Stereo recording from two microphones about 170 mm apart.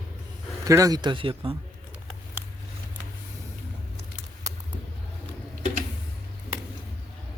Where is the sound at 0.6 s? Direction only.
20° right (ahead or behind).